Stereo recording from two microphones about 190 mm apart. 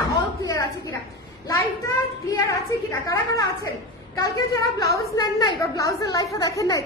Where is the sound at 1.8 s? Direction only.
15° left (ahead or behind).